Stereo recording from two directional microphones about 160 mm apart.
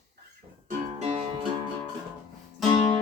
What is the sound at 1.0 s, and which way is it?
Music, 40° right (ahead or behind).